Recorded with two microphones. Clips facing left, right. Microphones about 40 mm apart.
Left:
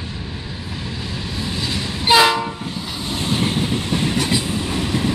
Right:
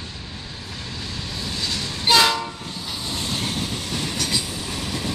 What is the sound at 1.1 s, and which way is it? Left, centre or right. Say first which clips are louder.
Train: left 4 dB; centre.